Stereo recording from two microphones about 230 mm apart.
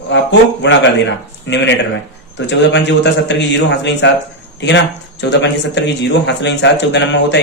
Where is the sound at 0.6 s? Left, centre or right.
Left.